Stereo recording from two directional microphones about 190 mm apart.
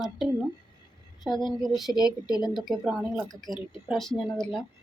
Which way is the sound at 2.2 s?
20° left (ahead or behind).